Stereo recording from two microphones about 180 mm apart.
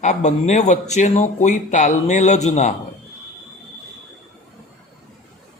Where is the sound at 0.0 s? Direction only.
40° left (ahead or behind).